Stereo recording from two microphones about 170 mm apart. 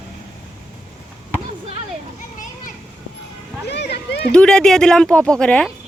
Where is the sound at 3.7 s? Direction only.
80° left.